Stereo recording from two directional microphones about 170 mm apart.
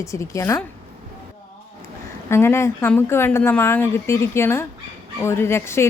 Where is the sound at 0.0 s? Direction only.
15° left (ahead or behind).